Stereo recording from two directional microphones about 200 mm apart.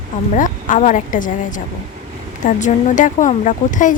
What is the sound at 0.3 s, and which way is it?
Speech, 40° left (ahead or behind).